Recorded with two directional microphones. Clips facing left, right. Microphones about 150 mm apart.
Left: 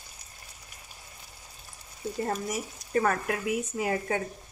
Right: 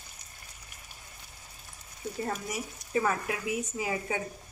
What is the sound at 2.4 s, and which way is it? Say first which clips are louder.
Speech: left 3 dB; 55° left (ahead or behind).